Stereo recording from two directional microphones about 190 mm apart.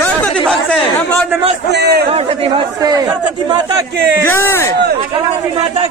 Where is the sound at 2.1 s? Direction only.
30° right (ahead or behind).